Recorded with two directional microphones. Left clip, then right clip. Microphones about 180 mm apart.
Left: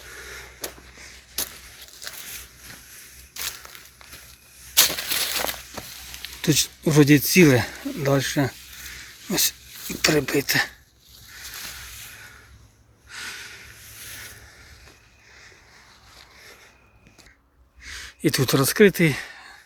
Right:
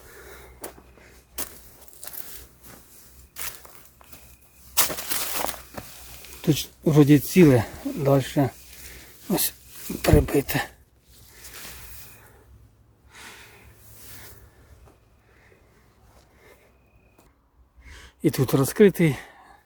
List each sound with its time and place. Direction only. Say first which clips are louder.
4.7 s walk: left 6 dB; 10° right (ahead or behind)
6.4 s speech: left 2 dB; 10° right (ahead or behind)
9.3 s speech: left 3 dB; 25° right (ahead or behind)
13.1 s snort: left 9 dB; 10° right (ahead or behind)
17.8 s gasp: left 1 dB; 15° right (ahead or behind)